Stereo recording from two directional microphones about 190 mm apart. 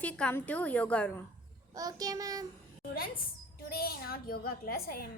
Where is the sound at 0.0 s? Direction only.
10° left (ahead or behind).